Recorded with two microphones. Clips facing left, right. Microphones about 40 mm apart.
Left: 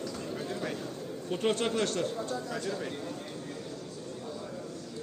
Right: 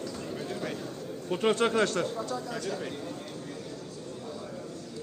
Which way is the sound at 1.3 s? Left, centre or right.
Right.